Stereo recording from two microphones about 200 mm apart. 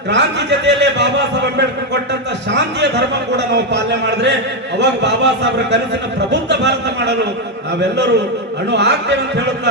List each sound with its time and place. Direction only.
0.1 s a man's voice: 60° right (ahead or behind)
8.7 s a man's voice: 60° right (ahead or behind)